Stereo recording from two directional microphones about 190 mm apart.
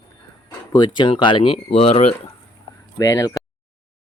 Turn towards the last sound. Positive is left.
turn(degrees=15)  # may be behind; listen again after turning